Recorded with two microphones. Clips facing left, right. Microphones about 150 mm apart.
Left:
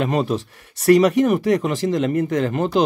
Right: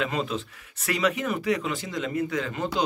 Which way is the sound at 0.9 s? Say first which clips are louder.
Left 9 dB; 45° left (ahead or behind).